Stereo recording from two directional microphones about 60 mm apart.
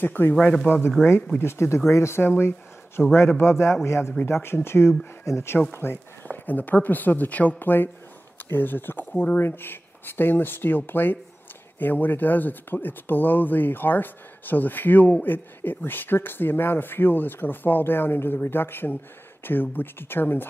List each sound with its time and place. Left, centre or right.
0.0 s speech: left
1.4 s speech: left
6.2 s speech: left
9.4 s speech: left